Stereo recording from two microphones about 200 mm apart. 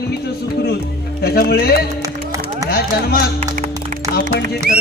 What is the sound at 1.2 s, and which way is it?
Speech, 50° left (ahead or behind).